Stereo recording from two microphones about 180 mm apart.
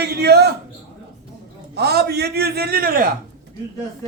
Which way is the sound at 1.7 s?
65° right (ahead or behind).